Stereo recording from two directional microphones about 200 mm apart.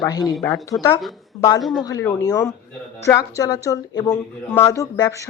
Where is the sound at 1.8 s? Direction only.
15° left (ahead or behind).